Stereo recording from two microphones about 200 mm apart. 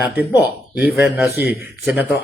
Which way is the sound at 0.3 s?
10° right (ahead or behind).